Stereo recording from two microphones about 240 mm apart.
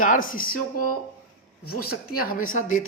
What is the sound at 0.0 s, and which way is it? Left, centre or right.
Speech, left.